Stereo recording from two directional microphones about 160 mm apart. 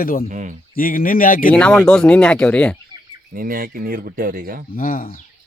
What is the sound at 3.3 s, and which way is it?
Speech, 60° right (ahead or behind).